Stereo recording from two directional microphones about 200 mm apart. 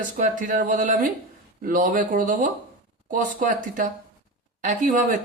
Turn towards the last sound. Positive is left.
turn(degrees=-40)  # may be behind; listen again after turning